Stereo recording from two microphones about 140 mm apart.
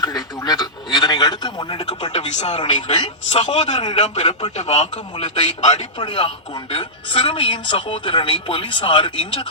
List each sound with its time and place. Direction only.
0.0 s a man's voice: 30° left (ahead or behind)
2.1 s a man's voice: 55° left (ahead or behind)
2.8 s a man's voice: 45° left (ahead or behind)
6.0 s speech: 40° left (ahead or behind)